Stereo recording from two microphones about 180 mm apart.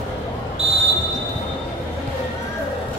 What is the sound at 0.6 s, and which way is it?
Basketball bounce, 35° right (ahead or behind).